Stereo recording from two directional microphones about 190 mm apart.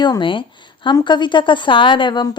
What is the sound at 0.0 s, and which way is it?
A woman's voice, 25° left (ahead or behind).